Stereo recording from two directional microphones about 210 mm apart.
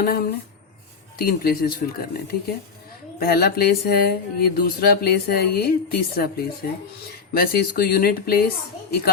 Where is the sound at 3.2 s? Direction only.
45° left (ahead or behind).